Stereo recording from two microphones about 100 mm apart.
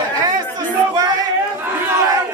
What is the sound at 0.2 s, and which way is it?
Chatter, 40° right (ahead or behind).